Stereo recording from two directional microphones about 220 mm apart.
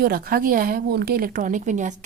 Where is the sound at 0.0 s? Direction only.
40° right (ahead or behind).